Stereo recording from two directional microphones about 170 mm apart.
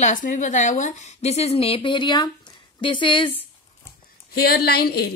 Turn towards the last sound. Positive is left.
turn(degrees=70)  # may be behind; listen again after turning